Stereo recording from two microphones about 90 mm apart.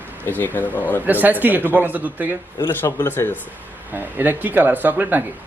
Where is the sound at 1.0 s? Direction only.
20° right (ahead or behind).